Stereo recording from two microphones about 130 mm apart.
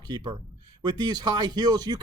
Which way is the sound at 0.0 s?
35° right (ahead or behind).